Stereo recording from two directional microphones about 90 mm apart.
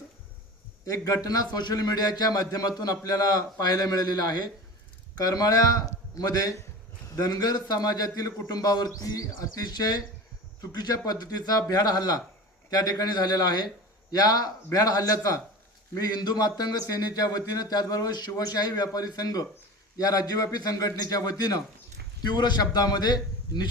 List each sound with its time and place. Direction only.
0.9 s a man's voice: 40° left (ahead or behind)